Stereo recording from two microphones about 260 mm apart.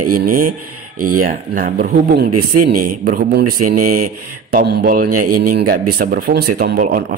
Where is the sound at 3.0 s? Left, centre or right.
Right.